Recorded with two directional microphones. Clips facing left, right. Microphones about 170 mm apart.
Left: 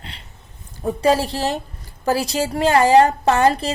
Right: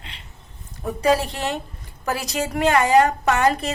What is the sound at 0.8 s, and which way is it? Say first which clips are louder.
A woman's voice: left 2 dB; 30° left (ahead or behind).